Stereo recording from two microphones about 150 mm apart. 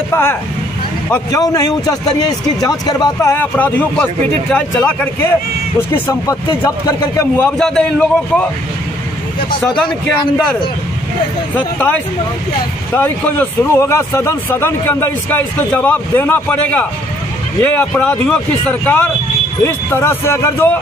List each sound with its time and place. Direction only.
0.1 s a man's voice: 15° left (ahead or behind)
12.9 s speech: 15° left (ahead or behind)